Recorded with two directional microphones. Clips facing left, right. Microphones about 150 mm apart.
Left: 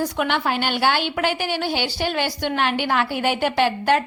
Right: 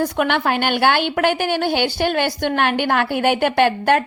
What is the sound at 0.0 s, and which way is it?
A woman's voice, 55° right (ahead or behind).